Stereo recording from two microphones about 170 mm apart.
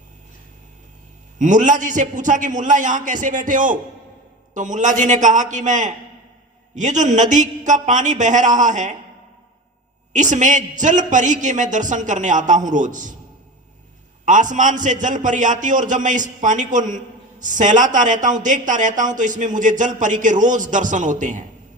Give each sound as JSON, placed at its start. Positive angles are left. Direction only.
{"t": 1.4, "sound": "a man's voice", "side_deg": -45}
{"t": 10.1, "sound": "a man's voice", "side_deg": -45}
{"t": 14.3, "sound": "a man's voice", "side_deg": -50}